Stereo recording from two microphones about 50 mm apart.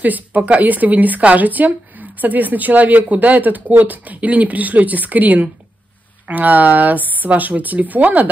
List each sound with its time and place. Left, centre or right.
0.0 s speech: right